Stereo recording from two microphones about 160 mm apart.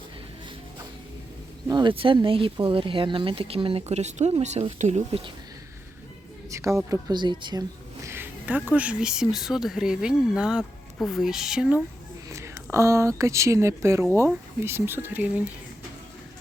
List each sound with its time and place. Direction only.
1.6 s speech: 25° right (ahead or behind); by 5.2 s 45° right (ahead or behind)
6.5 s a woman's voice: 20° right (ahead or behind)
8.0 s speech: 15° right (ahead or behind)
12.3 s speech: 15° right (ahead or behind)